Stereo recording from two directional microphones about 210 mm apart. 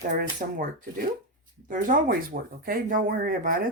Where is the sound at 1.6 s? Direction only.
40° right (ahead or behind).